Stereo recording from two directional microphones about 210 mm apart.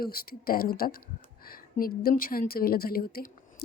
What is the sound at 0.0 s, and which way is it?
Speech, 45° left (ahead or behind).